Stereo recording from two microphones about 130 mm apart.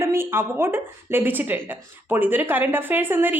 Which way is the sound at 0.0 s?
20° right (ahead or behind).